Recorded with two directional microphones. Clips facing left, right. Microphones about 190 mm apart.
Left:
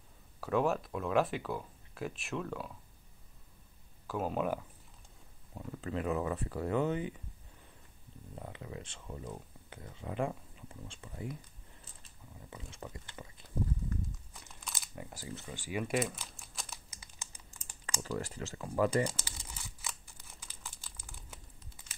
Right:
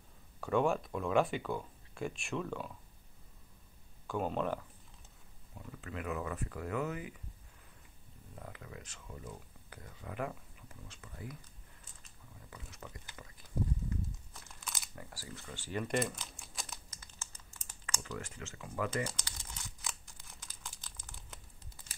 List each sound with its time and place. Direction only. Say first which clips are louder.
0.4 s speech: even; centre (ahead or behind)
4.1 s speech: left 1 dB; 5° left (ahead or behind)
5.5 s speech: left 7 dB; 35° left (ahead or behind)
8.4 s speech: left 4 dB; 25° left (ahead or behind)
11.8 s a sound: left 3 dB; 30° left (ahead or behind)
14.6 s crumpling: even; centre (ahead or behind)
15.0 s typing: left 4 dB; 20° left (ahead or behind)
17.8 s speech: left 5 dB; 35° left (ahead or behind)
19.0 s crumpling: left 4 dB; 5° left (ahead or behind)